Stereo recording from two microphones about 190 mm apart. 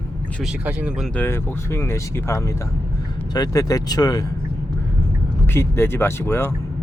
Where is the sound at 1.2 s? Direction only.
15° left (ahead or behind).